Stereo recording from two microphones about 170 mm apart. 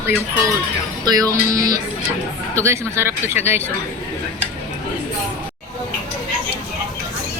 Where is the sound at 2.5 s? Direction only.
15° right (ahead or behind).